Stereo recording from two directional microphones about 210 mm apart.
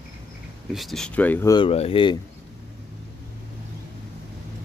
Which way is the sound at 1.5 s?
25° left (ahead or behind).